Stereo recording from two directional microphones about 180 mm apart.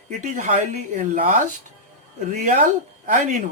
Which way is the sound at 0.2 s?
40° right (ahead or behind).